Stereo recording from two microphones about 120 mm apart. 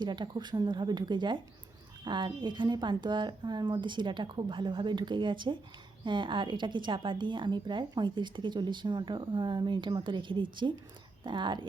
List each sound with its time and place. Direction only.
0.0 s speech: 40° right (ahead or behind)